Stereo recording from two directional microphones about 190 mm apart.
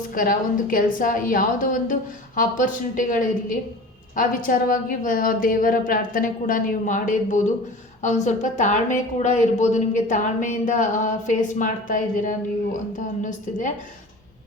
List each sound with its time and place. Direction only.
0.1 s a woman's voice: 45° left (ahead or behind)